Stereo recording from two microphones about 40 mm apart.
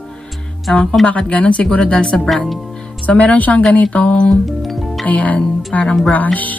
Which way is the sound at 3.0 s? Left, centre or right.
Left.